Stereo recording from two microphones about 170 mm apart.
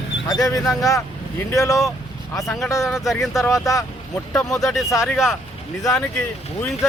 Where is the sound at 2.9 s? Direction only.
Centre (ahead or behind).